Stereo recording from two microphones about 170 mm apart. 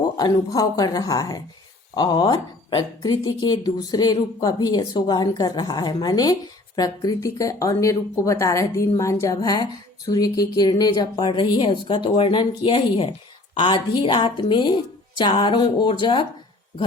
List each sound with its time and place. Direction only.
0.2 s speech: 20° left (ahead or behind)